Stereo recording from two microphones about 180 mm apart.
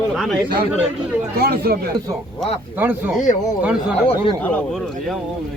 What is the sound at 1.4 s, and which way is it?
Speech, 60° right (ahead or behind).